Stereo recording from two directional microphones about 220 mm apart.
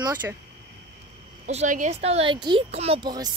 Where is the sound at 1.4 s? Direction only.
35° right (ahead or behind).